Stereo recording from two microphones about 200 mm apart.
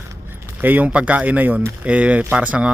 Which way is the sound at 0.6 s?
10° right (ahead or behind).